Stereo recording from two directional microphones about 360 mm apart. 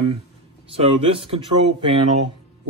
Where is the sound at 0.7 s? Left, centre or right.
Centre.